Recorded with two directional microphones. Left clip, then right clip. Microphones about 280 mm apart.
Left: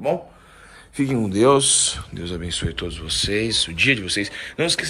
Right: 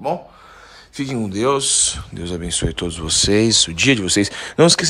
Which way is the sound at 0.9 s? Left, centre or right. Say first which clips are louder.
Left 3 dB; centre.